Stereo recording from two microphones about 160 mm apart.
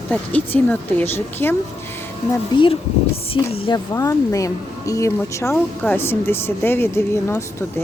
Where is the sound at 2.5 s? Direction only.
30° left (ahead or behind).